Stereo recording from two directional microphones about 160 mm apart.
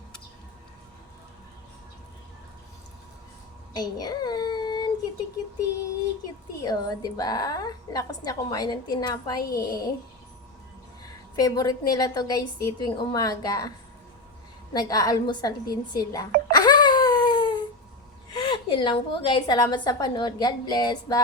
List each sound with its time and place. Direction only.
3.8 s a child's voice: 25° left (ahead or behind)
6.6 s a woman's voice: 25° left (ahead or behind)
11.0 s a woman's voice: 20° left (ahead or behind)